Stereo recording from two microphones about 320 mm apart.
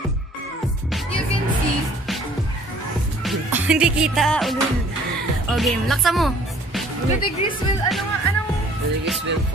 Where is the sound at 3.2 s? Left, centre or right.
Centre.